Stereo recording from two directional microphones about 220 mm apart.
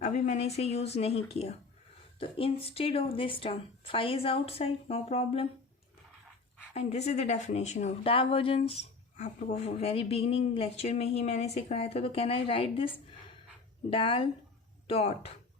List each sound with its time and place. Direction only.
0.0 s speech: 30° left (ahead or behind)
6.7 s speech: 30° left (ahead or behind)